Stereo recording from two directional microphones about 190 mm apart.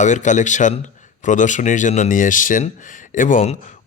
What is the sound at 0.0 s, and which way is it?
Speech, 40° left (ahead or behind).